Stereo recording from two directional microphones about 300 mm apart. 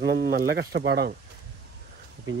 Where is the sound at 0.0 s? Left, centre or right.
Right.